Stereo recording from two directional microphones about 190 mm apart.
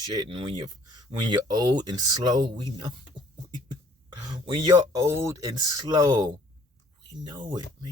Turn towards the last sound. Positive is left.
turn(degrees=-20)  # may be behind; listen again after turning